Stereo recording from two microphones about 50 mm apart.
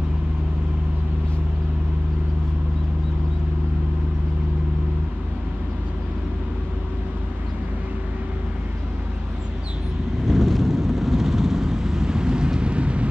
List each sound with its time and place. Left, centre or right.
10.2 s vehicle: centre; by 13.1 s right